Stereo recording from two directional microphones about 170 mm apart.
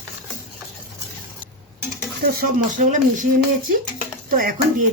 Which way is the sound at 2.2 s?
55° right (ahead or behind).